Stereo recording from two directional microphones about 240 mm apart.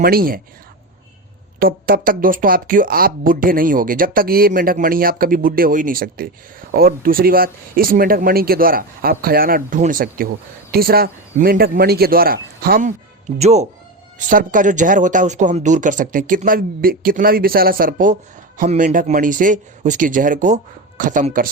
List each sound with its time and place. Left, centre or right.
0.0 s speech: right
1.5 s speech: right